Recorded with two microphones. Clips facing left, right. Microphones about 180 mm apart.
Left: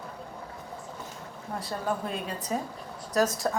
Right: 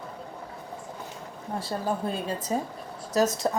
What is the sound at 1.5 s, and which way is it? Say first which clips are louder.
Speech: right 2 dB; 30° right (ahead or behind).